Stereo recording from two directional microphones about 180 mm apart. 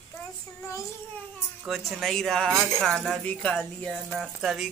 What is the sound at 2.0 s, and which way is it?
Speech, centre (ahead or behind).